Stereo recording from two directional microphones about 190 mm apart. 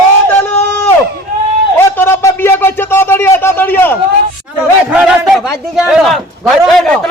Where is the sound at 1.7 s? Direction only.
10° left (ahead or behind).